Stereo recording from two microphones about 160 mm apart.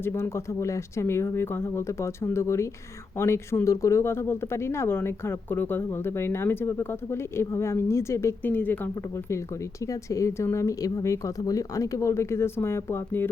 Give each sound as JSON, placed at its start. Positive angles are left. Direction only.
{"t": 0.0, "sound": "speech", "side_deg": 15}